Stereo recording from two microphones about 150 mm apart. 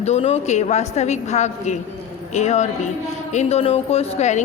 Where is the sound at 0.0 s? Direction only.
45° left (ahead or behind).